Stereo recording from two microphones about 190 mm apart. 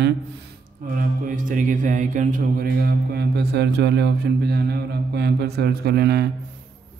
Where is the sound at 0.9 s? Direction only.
45° right (ahead or behind).